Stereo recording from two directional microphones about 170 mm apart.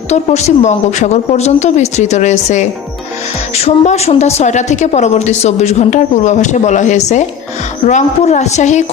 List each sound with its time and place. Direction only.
0.1 s a woman's voice: 40° left (ahead or behind)